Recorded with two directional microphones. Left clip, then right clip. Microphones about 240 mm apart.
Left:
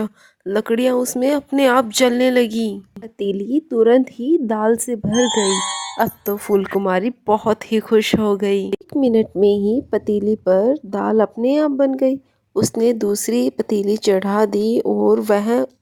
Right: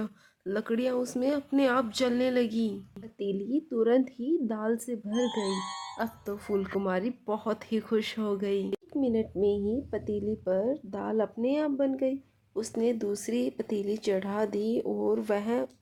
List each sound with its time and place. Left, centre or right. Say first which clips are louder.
0.0 s speech: left 11 dB; left
5.2 s speech: left 14 dB; left
6.0 s speech: left 16 dB; left